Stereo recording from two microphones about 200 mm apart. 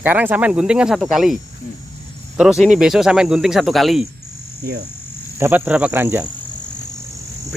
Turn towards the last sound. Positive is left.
turn(degrees=-10)  # may be behind; listen again after turning